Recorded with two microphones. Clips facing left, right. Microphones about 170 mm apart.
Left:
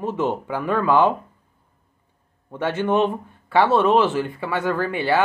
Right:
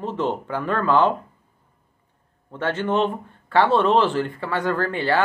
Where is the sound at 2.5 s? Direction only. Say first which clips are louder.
Left 2 dB; 10° left (ahead or behind).